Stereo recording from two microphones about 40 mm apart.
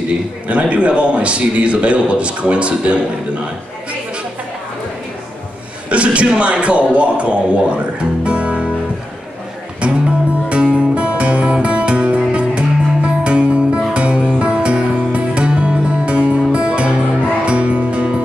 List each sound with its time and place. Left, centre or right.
0.5 s a man's voice: right
5.9 s a man's voice: right
9.8 s music: right